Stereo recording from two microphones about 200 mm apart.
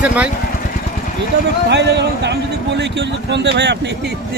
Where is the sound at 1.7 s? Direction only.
60° right (ahead or behind).